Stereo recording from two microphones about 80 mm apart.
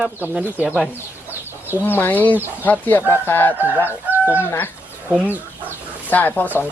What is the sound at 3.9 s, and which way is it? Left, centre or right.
Chicken, right.